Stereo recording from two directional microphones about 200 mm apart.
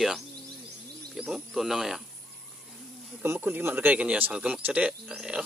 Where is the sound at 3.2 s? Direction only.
10° right (ahead or behind).